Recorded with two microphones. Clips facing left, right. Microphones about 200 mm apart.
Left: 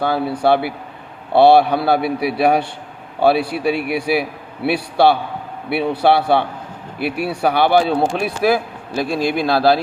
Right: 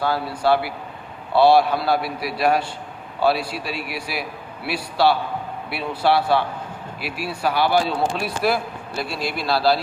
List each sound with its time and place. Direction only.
0.0 s a man's voice: 60° left (ahead or behind)